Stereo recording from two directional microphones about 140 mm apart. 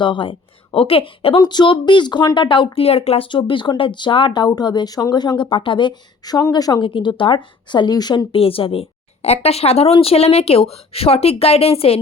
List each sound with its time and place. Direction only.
0.0 s a woman's voice: 35° left (ahead or behind)